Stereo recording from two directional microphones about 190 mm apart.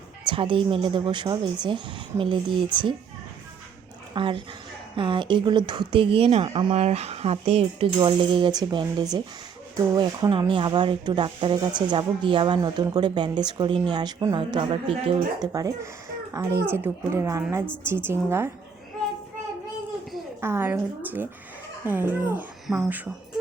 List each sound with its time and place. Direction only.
0.3 s speech: 25° right (ahead or behind)
4.1 s speech: 25° right (ahead or behind)
20.4 s speech: 10° right (ahead or behind)